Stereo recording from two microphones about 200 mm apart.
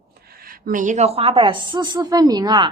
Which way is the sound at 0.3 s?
45° right (ahead or behind).